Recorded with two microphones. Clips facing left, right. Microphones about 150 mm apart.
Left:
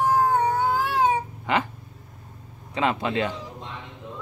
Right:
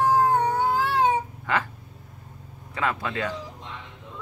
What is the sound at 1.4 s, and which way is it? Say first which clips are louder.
Cat: left 2 dB; 20° left (ahead or behind).